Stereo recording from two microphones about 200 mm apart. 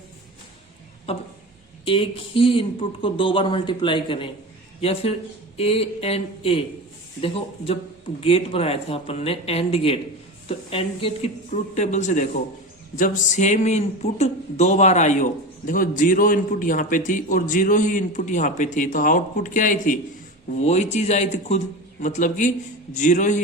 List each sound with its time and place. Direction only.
1.1 s speech: 30° left (ahead or behind)